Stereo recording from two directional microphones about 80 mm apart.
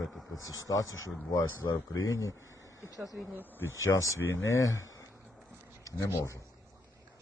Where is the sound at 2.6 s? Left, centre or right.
Left.